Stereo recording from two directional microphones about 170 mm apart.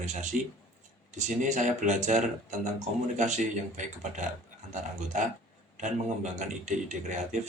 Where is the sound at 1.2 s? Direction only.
45° right (ahead or behind).